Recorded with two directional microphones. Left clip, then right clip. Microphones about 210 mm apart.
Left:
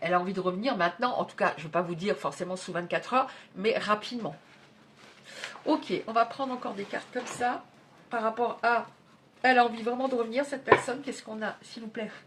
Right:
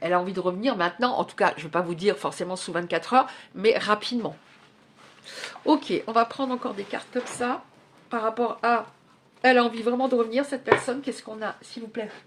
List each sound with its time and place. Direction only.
0.0 s speech: 35° right (ahead or behind)
5.6 s speech: 45° right (ahead or behind)